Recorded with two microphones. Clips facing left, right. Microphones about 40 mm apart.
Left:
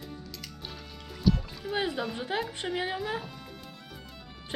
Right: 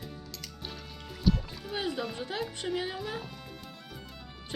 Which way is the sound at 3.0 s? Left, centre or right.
Centre.